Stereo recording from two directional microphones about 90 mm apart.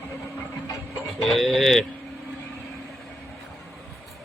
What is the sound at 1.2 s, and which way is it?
Speech, centre (ahead or behind).